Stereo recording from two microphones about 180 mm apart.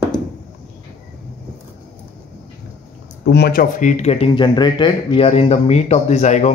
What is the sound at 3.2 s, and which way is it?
Speech, 65° left (ahead or behind).